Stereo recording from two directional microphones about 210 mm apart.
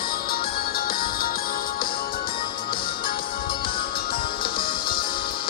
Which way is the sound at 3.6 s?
25° left (ahead or behind).